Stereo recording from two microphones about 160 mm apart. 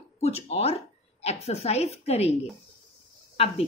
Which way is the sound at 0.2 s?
40° left (ahead or behind).